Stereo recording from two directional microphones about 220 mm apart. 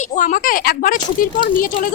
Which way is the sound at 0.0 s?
35° left (ahead or behind).